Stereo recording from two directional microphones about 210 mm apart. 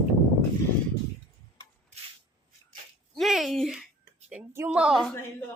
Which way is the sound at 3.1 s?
Centre (ahead or behind).